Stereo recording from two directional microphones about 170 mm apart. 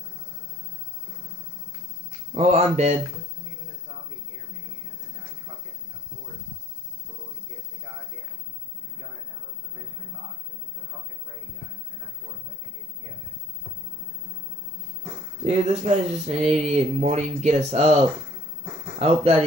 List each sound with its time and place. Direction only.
2.3 s speech: 40° right (ahead or behind)
15.4 s speech: 40° right (ahead or behind)
18.9 s speech: 35° right (ahead or behind)